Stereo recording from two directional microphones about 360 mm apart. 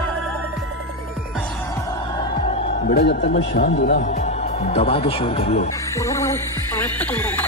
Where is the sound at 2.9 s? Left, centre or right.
Left; by 7.4 s centre.